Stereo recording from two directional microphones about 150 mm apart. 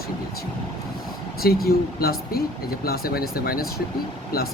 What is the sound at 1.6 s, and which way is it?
Speech, 90° left.